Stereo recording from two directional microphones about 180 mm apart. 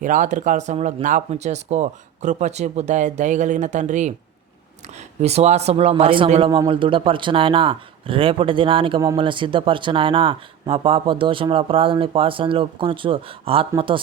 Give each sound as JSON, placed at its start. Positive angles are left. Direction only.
{"t": 0.0, "sound": "speech", "side_deg": -45}
{"t": 5.2, "sound": "speech", "side_deg": -35}